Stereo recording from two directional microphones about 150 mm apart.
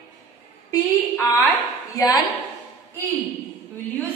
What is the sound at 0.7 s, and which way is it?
A woman's voice, 20° left (ahead or behind).